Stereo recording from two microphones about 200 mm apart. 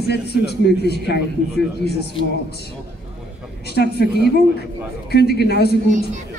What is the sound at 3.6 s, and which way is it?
Speech, 55° left (ahead or behind).